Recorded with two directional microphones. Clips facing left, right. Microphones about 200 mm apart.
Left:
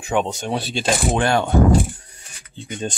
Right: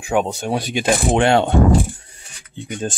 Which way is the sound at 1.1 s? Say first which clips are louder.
Right 6 dB; 25° right (ahead or behind).